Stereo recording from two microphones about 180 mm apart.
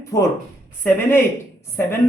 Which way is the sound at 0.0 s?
15° left (ahead or behind).